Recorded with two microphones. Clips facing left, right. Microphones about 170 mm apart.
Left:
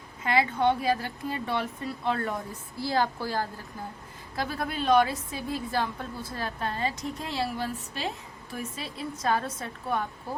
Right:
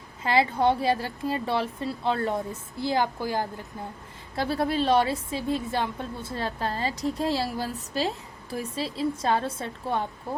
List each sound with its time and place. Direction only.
0.3 s a woman's voice: 30° right (ahead or behind); by 3.5 s 15° right (ahead or behind)
4.4 s a woman's voice: 30° right (ahead or behind)